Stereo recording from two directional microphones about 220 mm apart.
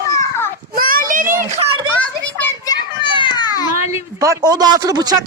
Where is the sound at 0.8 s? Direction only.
40° right (ahead or behind).